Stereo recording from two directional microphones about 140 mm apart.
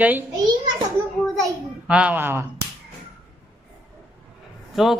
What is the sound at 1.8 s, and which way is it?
Speech, 10° right (ahead or behind).